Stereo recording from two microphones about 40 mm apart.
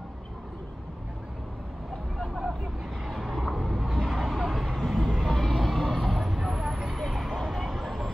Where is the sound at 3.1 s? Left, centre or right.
Centre.